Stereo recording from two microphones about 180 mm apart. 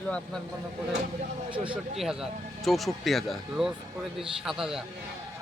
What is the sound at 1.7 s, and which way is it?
A man's voice, 5° right (ahead or behind).